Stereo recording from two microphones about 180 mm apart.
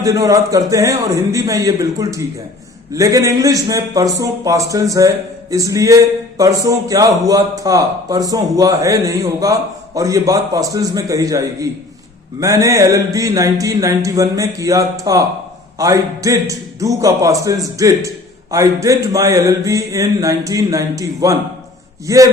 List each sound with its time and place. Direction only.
0.0 s a man's voice: 20° right (ahead or behind)